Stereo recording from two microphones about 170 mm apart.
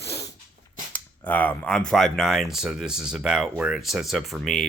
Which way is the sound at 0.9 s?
10° left (ahead or behind).